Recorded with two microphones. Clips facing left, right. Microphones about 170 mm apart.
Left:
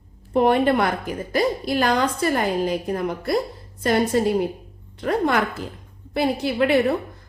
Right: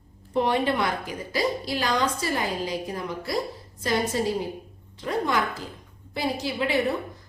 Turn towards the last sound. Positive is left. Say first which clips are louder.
# left 6 dB
turn(degrees=60)  # may be behind; listen again after turning